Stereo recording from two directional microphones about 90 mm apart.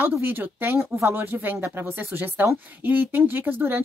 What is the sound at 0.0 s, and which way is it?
A woman's voice, 25° right (ahead or behind).